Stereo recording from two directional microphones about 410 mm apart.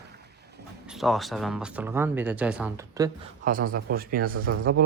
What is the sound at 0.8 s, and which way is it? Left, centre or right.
Speech, centre.